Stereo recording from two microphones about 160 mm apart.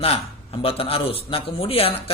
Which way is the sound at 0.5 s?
35° left (ahead or behind).